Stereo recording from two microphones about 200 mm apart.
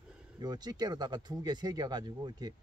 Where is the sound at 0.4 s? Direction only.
20° right (ahead or behind).